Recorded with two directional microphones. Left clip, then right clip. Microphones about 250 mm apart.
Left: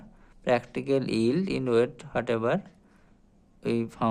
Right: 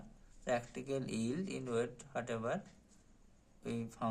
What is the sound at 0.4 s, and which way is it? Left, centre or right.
Speech, left.